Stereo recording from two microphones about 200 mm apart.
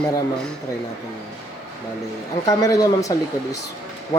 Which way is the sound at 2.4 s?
15° left (ahead or behind).